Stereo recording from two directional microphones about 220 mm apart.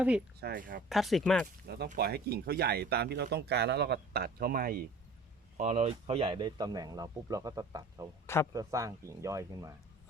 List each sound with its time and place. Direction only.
0.3 s speech: 45° right (ahead or behind)
0.9 s speech: centre (ahead or behind)
1.6 s speech: 45° right (ahead or behind)
5.5 s speech: 30° right (ahead or behind); by 9.7 s 15° right (ahead or behind)